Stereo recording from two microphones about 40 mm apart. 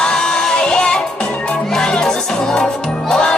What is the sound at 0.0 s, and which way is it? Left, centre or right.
Music, centre.